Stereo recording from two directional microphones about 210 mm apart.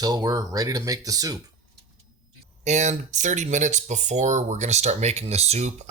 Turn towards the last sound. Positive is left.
turn(degrees=-30)  # may be behind; listen again after turning